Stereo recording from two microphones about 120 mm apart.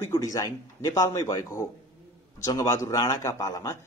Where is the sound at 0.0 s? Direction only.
25° left (ahead or behind).